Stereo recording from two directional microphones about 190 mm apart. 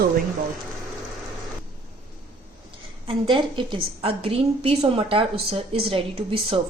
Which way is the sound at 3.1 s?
25° right (ahead or behind).